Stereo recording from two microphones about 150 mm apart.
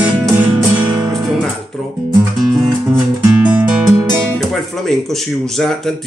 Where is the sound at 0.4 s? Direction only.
10° right (ahead or behind).